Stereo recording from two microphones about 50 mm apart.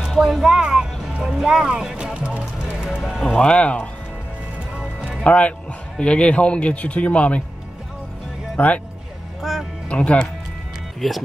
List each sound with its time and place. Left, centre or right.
0.0 s music: centre
3.2 s speech: centre
4.7 s music: right
5.2 s speech: left
8.5 s speech: left
9.4 s music: centre
9.8 s speech: left
11.0 s speech: centre